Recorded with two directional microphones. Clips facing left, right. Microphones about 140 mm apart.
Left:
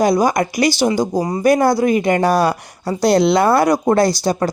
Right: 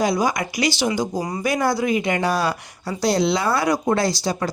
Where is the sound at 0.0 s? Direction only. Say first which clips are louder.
Left 6 dB; 45° left (ahead or behind).